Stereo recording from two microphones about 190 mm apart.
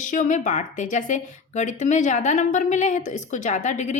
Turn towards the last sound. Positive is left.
turn(degrees=40)  # may be behind; listen again after turning